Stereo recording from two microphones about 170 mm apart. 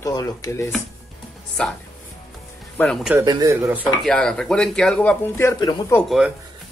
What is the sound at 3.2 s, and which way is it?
Speech, 20° right (ahead or behind).